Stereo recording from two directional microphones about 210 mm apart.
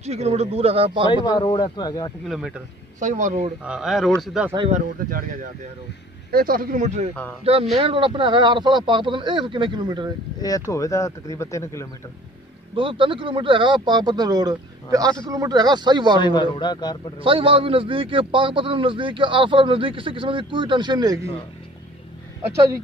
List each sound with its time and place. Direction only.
0.0 s a man's voice: 30° right (ahead or behind)
1.2 s a man's voice: 20° left (ahead or behind)
2.2 s speech: centre (ahead or behind)
3.0 s speech: 35° right (ahead or behind)
3.6 s speech: 5° right (ahead or behind)
4.6 s speech: 30° right (ahead or behind)
7.7 s a man's voice: 25° right (ahead or behind)
10.7 s speech: 15° left (ahead or behind)
12.7 s a man's voice: 25° right (ahead or behind)
16.2 s a man's voice: 20° left (ahead or behind)
17.2 s a man's voice: 25° right (ahead or behind)